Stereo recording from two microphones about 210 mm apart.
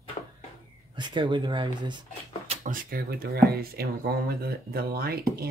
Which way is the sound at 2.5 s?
40° right (ahead or behind).